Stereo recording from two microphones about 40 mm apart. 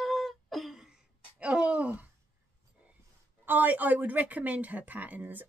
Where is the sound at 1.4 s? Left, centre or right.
Right.